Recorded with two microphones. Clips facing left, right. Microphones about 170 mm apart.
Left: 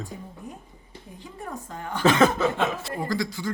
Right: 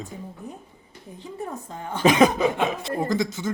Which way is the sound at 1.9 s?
20° right (ahead or behind).